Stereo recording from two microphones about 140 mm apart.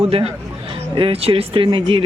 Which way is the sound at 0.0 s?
45° right (ahead or behind).